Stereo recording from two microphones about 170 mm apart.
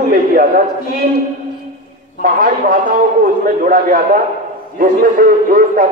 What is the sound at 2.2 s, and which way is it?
A man's voice, 55° right (ahead or behind).